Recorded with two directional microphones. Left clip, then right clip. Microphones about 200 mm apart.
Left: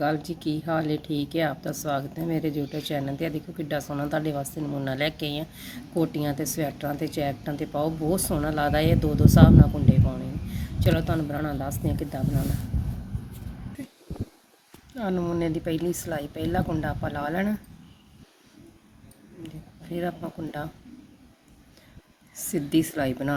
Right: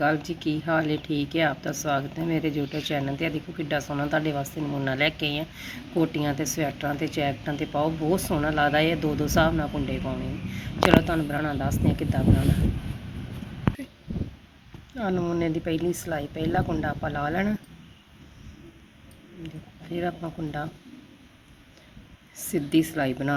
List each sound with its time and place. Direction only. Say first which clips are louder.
0.0 s speech: right 2 dB; 15° left (ahead or behind)
14.9 s speech: right 1 dB; 10° left (ahead or behind)
19.9 s speech: right 1 dB; 10° left (ahead or behind)
22.4 s speech: right 1 dB; 15° left (ahead or behind)